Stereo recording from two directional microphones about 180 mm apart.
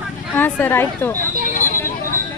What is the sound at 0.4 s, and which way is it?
Speech, 10° left (ahead or behind).